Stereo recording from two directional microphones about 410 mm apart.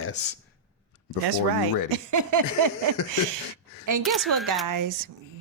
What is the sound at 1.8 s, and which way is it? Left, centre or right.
Speech, right.